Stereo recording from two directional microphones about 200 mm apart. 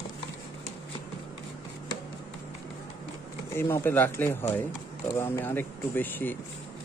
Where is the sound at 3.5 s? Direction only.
10° left (ahead or behind).